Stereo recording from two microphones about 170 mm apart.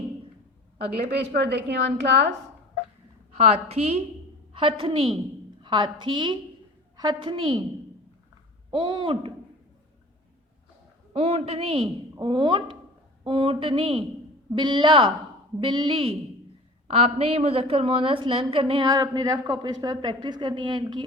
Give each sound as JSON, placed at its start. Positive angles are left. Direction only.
{"t": 1.1, "sound": "a woman's voice", "side_deg": -80}
{"t": 3.3, "sound": "a woman's voice", "side_deg": -40}
{"t": 8.7, "sound": "a woman's voice", "side_deg": -30}
{"t": 11.1, "sound": "a woman's voice", "side_deg": -35}